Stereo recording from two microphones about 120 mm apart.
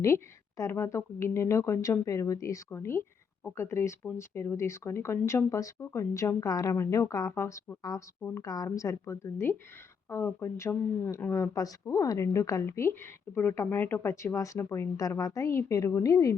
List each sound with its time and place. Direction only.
0.0 s speech: 25° left (ahead or behind)